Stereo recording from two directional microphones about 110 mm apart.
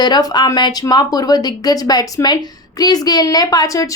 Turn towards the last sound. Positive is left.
turn(degrees=30)  # may be behind; listen again after turning